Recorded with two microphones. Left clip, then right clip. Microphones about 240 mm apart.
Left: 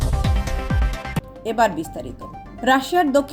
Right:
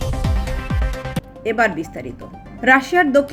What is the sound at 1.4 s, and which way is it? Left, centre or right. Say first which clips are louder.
A woman's voice: right 1 dB; left.